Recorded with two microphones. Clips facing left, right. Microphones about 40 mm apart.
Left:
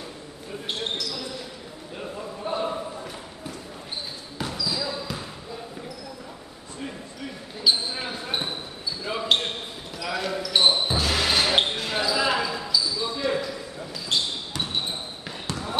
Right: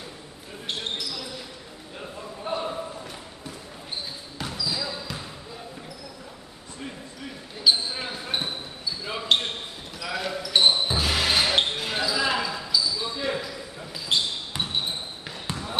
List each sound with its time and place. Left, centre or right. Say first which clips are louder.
2.4 s basketball bounce: left 1 dB; centre
4.4 s a sound: left 2 dB; centre
7.6 s basketball bounce: right 1 dB; centre
14.1 s basketball bounce: right 1 dB; centre
14.6 s basketball bounce: right 1 dB; centre